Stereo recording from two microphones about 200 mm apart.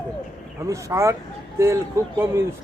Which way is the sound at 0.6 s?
15° right (ahead or behind).